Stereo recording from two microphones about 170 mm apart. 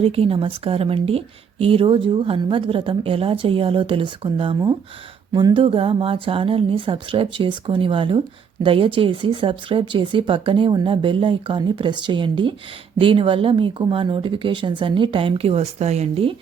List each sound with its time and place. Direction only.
0.0 s a woman's voice: 35° right (ahead or behind)